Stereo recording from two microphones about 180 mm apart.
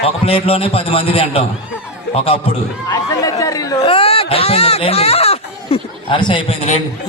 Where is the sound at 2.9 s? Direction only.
20° left (ahead or behind).